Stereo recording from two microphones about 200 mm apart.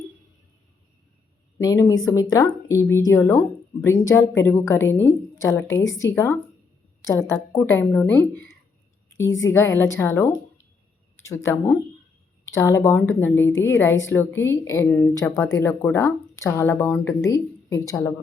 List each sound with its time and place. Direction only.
1.5 s speech: 15° left (ahead or behind)
7.5 s speech: 10° left (ahead or behind)
9.0 s a sound: 15° left (ahead or behind)
9.5 s speech: 15° left (ahead or behind)